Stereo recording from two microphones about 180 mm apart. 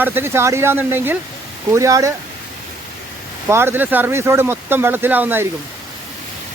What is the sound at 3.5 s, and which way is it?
Speech, 15° right (ahead or behind).